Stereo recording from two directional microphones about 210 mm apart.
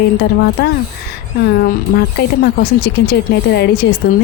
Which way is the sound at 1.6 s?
50° left (ahead or behind).